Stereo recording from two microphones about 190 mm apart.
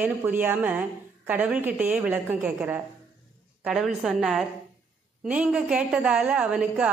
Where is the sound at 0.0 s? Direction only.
10° right (ahead or behind).